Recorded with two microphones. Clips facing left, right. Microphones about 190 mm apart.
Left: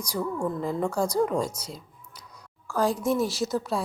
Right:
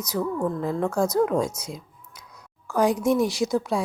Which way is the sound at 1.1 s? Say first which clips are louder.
Right 3 dB; 5° right (ahead or behind).